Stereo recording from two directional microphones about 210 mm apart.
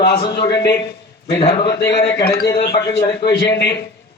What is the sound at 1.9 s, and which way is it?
Speech, 50° left (ahead or behind).